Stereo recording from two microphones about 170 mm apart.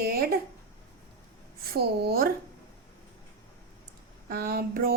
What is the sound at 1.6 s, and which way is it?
Speech, 65° right (ahead or behind).